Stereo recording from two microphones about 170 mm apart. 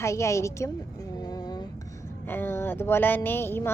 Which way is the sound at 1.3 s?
25° left (ahead or behind).